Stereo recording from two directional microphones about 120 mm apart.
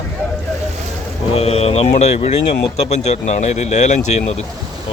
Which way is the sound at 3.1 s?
70° left (ahead or behind).